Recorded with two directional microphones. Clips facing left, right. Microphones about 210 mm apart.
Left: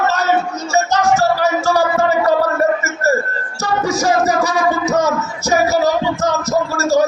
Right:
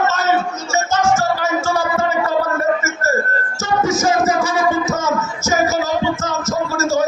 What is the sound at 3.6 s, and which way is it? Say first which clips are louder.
Music: even; 35° left (ahead or behind).